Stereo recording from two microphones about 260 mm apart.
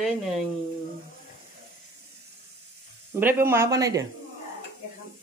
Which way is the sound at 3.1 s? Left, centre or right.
Centre.